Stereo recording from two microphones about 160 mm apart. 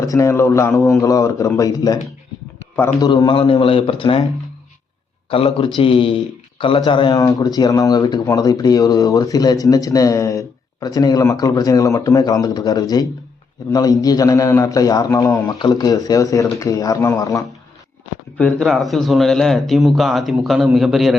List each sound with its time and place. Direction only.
0.0 s speech: 20° left (ahead or behind)
3.0 s a man's voice: 25° left (ahead or behind)
5.3 s a man's voice: 35° left (ahead or behind)
18.3 s speech: 5° left (ahead or behind)